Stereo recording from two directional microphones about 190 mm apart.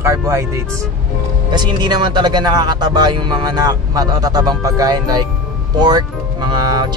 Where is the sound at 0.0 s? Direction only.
15° right (ahead or behind).